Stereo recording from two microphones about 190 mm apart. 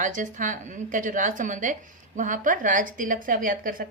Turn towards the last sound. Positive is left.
turn(degrees=-45)  # may be behind; listen again after turning